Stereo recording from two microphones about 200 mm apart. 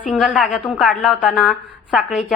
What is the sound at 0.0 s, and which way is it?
A woman's voice, centre (ahead or behind).